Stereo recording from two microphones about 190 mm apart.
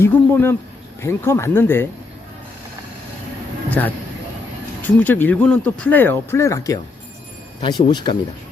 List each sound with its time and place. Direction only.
0.0 s speech: 10° left (ahead or behind)
3.7 s speech: 10° left (ahead or behind)